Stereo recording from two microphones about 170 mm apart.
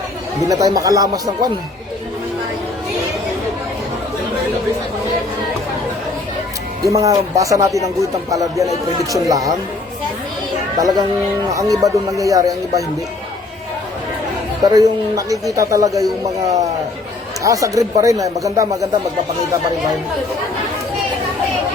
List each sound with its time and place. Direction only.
0.4 s speech: 20° right (ahead or behind)
6.8 s speech: 20° right (ahead or behind)
10.8 s speech: 20° right (ahead or behind)
14.6 s speech: 20° right (ahead or behind)